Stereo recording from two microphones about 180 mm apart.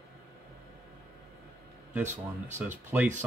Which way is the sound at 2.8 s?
10° right (ahead or behind).